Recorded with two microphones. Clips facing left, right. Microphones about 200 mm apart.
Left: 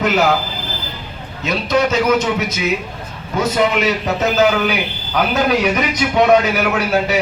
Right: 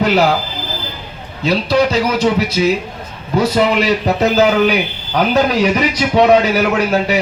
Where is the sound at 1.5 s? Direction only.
35° right (ahead or behind).